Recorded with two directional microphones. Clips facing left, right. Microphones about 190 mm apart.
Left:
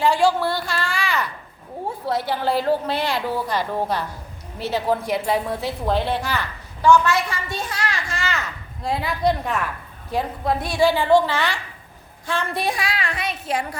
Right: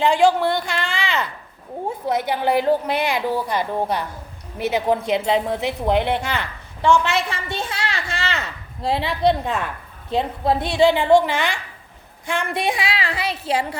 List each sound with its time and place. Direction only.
0.0 s a woman's voice: 20° right (ahead or behind)